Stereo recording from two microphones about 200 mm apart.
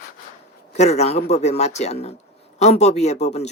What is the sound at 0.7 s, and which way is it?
Speech, 35° left (ahead or behind).